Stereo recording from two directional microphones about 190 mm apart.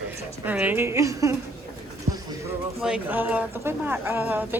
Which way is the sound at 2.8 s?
5° right (ahead or behind).